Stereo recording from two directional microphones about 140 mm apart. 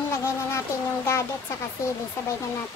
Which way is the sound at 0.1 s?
20° left (ahead or behind).